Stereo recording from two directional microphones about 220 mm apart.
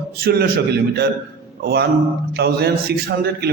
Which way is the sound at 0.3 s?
45° right (ahead or behind).